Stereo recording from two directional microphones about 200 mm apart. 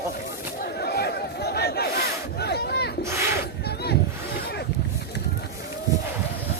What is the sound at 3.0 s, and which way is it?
Speech, 15° right (ahead or behind).